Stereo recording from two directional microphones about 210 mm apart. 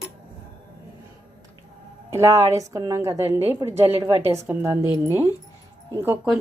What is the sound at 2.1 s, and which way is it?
A woman's voice, 15° right (ahead or behind).